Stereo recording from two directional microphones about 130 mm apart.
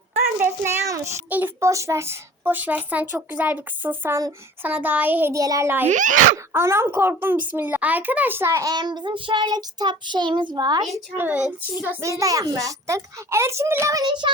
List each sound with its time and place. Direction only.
0.3 s a child's voice: 15° right (ahead or behind)
1.3 s a woman's voice: 15° right (ahead or behind)
5.9 s speech: 75° right (ahead or behind)
6.5 s a child's voice: 20° right (ahead or behind)
11.2 s a woman's voice: 10° right (ahead or behind); by 14.3 s 35° right (ahead or behind)